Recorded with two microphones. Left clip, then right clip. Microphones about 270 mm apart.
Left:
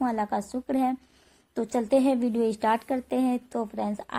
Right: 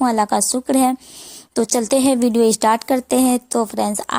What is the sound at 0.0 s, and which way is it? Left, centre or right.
A woman's voice, right.